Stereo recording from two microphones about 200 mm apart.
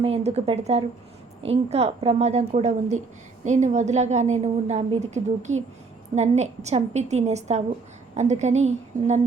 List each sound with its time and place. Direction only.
0.0 s a woman's voice: 30° right (ahead or behind)